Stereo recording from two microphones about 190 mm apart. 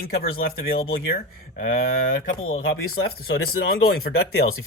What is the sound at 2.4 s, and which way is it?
Speech, 90° left.